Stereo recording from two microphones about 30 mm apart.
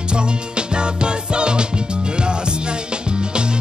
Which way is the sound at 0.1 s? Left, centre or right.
Right.